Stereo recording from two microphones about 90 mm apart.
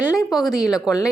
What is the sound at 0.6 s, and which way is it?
Speech, 45° left (ahead or behind).